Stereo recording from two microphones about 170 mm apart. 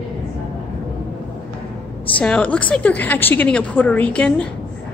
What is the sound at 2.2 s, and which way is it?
A woman's voice, 5° left (ahead or behind).